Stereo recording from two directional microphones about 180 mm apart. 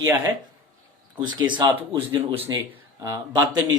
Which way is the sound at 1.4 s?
25° right (ahead or behind).